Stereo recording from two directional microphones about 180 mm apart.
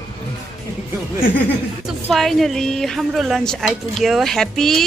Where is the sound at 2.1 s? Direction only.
Centre (ahead or behind).